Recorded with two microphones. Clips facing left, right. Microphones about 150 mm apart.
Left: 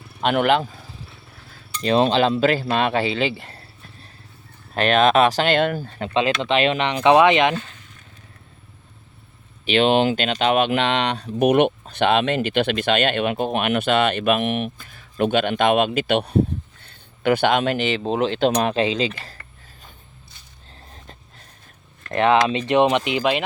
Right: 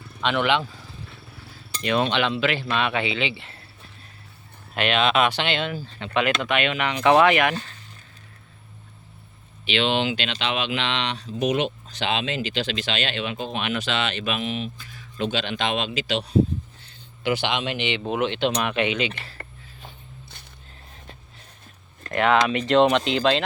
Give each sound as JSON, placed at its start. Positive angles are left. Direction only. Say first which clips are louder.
{"t": 0.2, "sound": "speech", "louder": "left 4 dB", "side_deg": 45}
{"t": 1.8, "sound": "speech", "louder": "left 5 dB", "side_deg": 35}
{"t": 4.7, "sound": "speech", "louder": "left 5 dB", "side_deg": 40}
{"t": 6.4, "sound": "speech", "louder": "left 4 dB", "side_deg": 30}
{"t": 9.6, "sound": "speech", "louder": "left 6 dB", "side_deg": 45}
{"t": 18.0, "sound": "speech", "louder": "left 3 dB", "side_deg": 30}
{"t": 22.1, "sound": "speech", "louder": "left 3 dB", "side_deg": 25}